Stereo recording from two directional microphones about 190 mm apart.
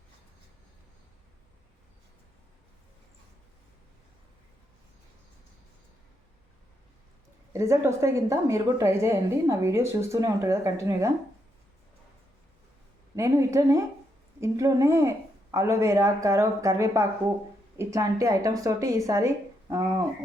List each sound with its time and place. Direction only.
7.5 s a woman's voice: 15° right (ahead or behind)
13.1 s a woman's voice: 15° right (ahead or behind)